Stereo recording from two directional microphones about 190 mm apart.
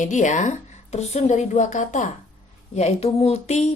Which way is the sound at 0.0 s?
40° left (ahead or behind).